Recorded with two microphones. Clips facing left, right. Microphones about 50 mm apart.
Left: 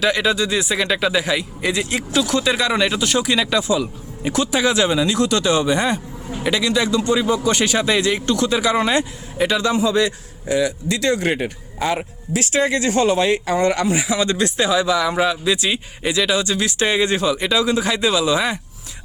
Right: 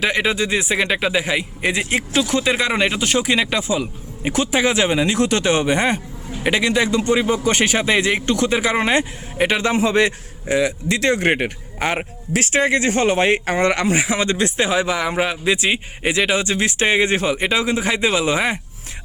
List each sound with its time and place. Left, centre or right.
0.0 s speech: right
13.4 s speech: right
14.3 s speech: right